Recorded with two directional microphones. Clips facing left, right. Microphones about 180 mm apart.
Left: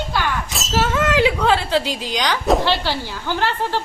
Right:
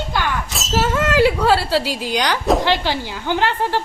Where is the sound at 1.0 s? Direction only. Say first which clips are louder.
Right 2 dB; 10° right (ahead or behind).